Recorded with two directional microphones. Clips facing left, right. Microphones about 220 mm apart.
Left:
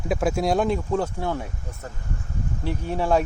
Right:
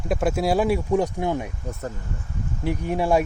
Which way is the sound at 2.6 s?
15° right (ahead or behind).